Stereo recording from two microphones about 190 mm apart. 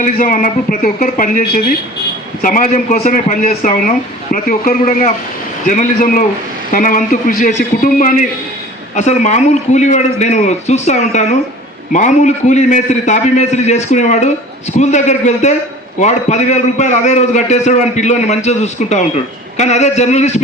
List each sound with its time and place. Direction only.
0.0 s a man's voice: 45° left (ahead or behind)